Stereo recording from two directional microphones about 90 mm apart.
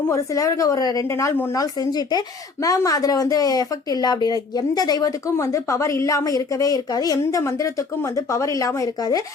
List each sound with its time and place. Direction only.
0.1 s a woman's voice: 35° left (ahead or behind)
5.4 s a woman's voice: 35° left (ahead or behind)